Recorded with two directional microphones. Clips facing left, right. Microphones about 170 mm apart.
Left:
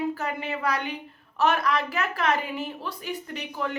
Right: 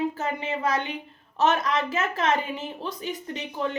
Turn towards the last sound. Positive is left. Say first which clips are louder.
# right 2 dB
turn(degrees=-20)  # may be behind; listen again after turning